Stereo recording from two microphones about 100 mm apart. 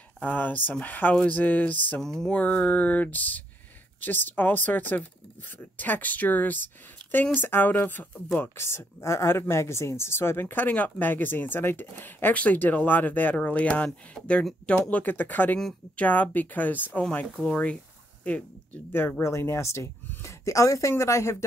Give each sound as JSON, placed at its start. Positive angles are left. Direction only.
{"t": 0.2, "sound": "speech", "side_deg": 15}
{"t": 2.0, "sound": "speech", "side_deg": 5}
{"t": 18.9, "sound": "speech", "side_deg": 20}